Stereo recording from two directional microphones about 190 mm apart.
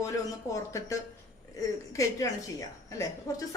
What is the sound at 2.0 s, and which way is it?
A woman's voice, 15° left (ahead or behind).